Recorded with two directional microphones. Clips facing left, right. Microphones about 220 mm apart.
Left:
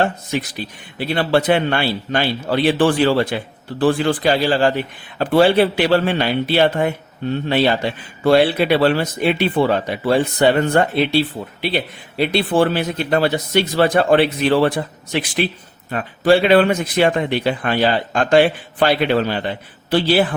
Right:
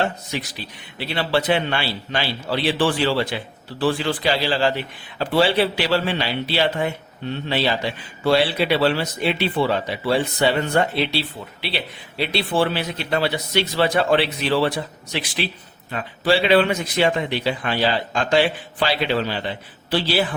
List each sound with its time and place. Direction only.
0.0 s speech: 50° left (ahead or behind)